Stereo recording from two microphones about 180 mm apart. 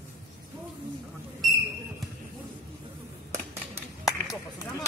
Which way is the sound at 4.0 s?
20° left (ahead or behind).